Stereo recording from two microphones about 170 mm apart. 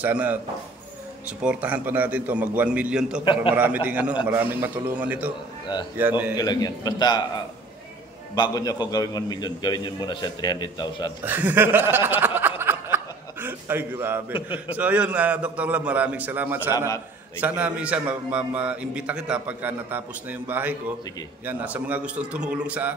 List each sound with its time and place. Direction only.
0.0 s a man's voice: 10° right (ahead or behind)
1.4 s a man's voice: 10° right (ahead or behind)
6.3 s a man's voice: 25° left (ahead or behind)
8.4 s a man's voice: 25° left (ahead or behind)
11.2 s snicker: 10° right (ahead or behind)
14.7 s a man's voice: 10° right (ahead or behind)